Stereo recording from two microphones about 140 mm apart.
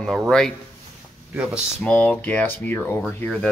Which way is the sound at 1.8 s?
10° left (ahead or behind).